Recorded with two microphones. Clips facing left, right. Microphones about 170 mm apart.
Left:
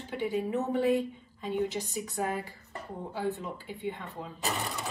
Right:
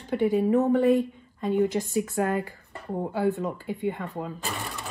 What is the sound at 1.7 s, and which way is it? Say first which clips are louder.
Speech: right 8 dB; 65° right (ahead or behind).